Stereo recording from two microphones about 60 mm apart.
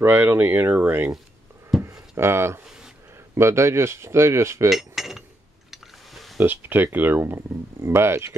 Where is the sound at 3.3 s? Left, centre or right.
Right.